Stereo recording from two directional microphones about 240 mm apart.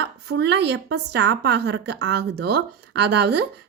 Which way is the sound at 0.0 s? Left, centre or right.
Right.